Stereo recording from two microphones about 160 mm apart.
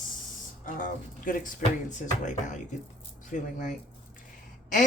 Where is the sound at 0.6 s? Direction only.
60° left (ahead or behind).